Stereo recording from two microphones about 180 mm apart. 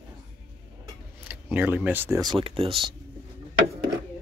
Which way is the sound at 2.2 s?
25° right (ahead or behind).